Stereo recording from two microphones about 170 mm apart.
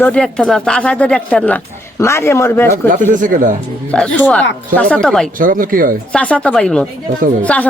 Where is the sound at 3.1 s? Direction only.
50° right (ahead or behind).